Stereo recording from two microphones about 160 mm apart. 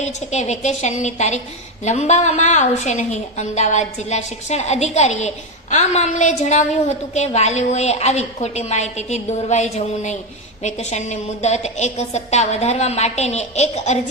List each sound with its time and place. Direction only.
0.0 s a woman's voice: 45° left (ahead or behind)